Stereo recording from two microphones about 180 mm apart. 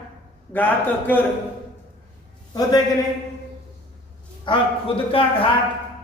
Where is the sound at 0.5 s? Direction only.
10° left (ahead or behind).